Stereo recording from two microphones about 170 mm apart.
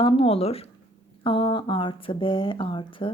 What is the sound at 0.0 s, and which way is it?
A woman's voice, 35° left (ahead or behind).